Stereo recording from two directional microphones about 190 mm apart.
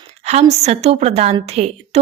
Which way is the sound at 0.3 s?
35° right (ahead or behind).